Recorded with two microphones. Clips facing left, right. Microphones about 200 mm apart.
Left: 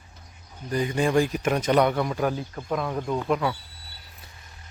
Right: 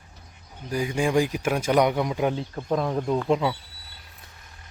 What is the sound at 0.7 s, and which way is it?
Speech, 10° right (ahead or behind).